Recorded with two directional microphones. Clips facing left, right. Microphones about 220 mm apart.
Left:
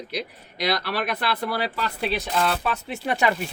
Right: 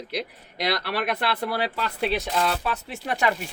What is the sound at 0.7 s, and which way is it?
Speech, 25° right (ahead or behind).